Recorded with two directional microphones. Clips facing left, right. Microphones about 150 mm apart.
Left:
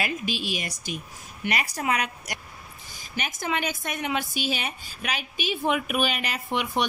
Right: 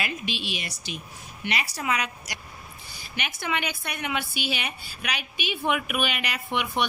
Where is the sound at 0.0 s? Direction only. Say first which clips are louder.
Left 3 dB; 40° left (ahead or behind).